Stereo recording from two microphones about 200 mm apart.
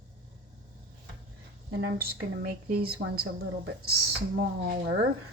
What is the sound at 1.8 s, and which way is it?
A woman's voice, 50° right (ahead or behind).